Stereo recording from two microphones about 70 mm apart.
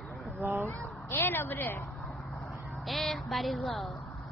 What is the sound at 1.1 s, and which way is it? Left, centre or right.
Speech, left.